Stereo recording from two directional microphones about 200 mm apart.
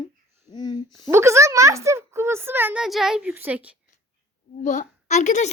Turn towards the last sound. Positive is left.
turn(degrees=35)  # may be behind; listen again after turning